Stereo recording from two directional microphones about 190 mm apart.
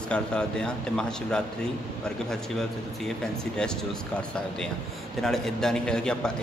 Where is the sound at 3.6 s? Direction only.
5° left (ahead or behind).